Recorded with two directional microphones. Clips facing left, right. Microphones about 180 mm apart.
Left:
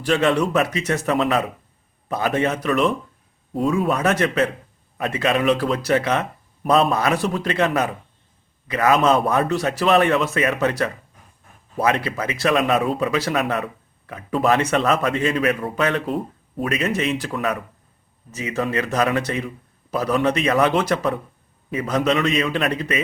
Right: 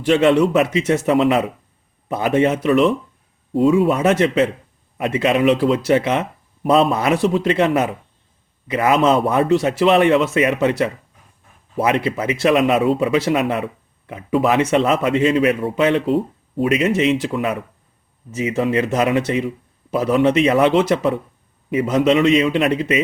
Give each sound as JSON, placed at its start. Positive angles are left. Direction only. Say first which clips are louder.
{"t": 0.0, "sound": "speech", "louder": "right 5 dB", "side_deg": -25}
{"t": 14.3, "sound": "speech", "louder": "right 2 dB", "side_deg": -5}
{"t": 14.6, "sound": "speech", "louder": "right 3 dB", "side_deg": -20}